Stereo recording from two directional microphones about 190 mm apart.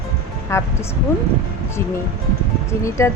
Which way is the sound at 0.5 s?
15° left (ahead or behind).